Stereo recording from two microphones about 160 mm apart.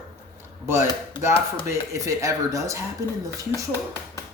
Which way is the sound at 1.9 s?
20° right (ahead or behind).